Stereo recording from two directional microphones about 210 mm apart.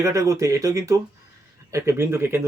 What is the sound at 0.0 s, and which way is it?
Speech, 15° right (ahead or behind).